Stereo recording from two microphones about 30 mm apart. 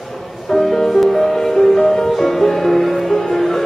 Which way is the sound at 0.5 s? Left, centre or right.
Centre.